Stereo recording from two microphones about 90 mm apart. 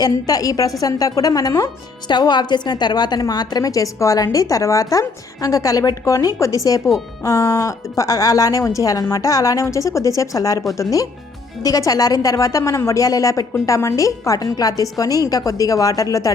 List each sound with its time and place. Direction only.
0.0 s a woman's voice: 45° left (ahead or behind)
11.6 s a woman's voice: 40° left (ahead or behind)